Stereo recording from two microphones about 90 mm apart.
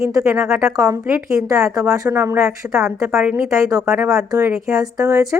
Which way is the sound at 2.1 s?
30° right (ahead or behind).